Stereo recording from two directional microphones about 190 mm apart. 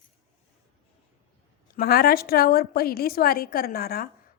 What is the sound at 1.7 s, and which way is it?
A woman's voice, 50° left (ahead or behind).